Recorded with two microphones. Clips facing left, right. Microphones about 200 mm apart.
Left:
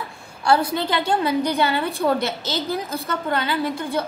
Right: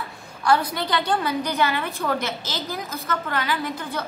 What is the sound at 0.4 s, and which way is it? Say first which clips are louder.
A woman's voice: left 2 dB; 30° left (ahead or behind).